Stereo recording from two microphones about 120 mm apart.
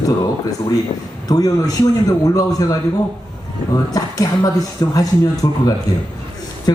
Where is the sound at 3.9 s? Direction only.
30° left (ahead or behind).